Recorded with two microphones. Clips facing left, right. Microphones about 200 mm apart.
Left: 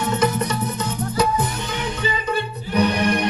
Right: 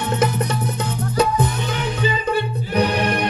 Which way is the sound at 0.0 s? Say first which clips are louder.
Even; 60° right (ahead or behind).